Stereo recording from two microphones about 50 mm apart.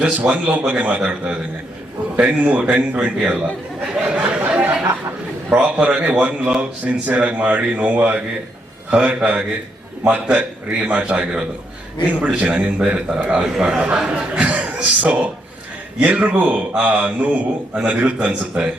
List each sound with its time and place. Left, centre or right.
0.0 s a man's voice: right
4.1 s a sound: right
5.5 s a man's voice: right
13.1 s a man's voice: centre